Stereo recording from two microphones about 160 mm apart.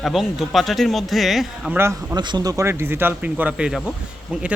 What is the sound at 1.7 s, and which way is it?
Speech, 15° right (ahead or behind).